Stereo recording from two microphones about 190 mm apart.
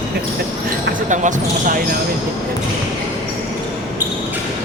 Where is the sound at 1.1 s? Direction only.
40° right (ahead or behind).